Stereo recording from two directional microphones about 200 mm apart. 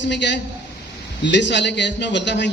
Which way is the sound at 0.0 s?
60° left (ahead or behind).